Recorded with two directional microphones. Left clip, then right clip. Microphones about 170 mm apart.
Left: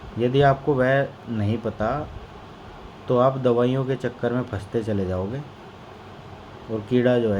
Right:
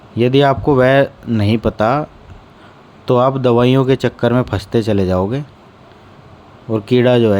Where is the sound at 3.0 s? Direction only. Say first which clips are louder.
Right 6 dB; 65° right (ahead or behind).